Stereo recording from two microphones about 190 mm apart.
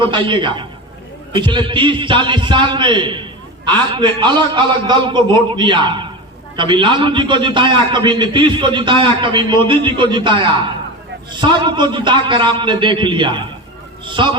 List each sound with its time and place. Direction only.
0.0 s a man's voice: 25° right (ahead or behind)